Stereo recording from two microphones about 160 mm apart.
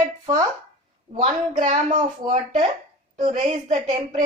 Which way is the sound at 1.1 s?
45° right (ahead or behind).